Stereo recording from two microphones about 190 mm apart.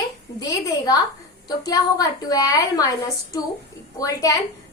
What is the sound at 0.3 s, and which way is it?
A woman's voice, 20° left (ahead or behind).